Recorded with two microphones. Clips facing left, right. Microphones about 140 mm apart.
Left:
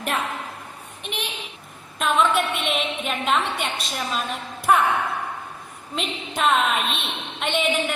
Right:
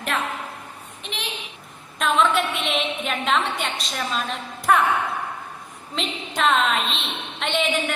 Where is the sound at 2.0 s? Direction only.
Centre (ahead or behind).